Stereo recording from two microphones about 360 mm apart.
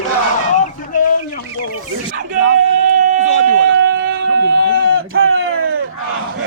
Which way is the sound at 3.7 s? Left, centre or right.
Right.